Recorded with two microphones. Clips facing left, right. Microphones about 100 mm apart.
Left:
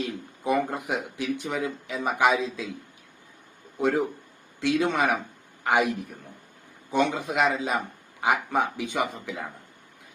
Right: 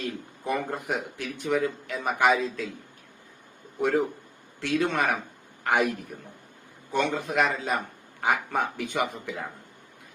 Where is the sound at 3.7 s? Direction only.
10° left (ahead or behind).